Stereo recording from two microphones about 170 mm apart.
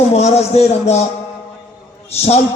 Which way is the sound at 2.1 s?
40° left (ahead or behind).